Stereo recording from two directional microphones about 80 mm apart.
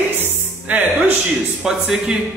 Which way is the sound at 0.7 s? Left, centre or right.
Centre.